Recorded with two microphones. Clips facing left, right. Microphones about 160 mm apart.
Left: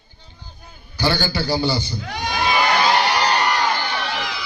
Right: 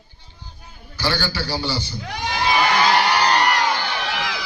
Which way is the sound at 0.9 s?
15° left (ahead or behind).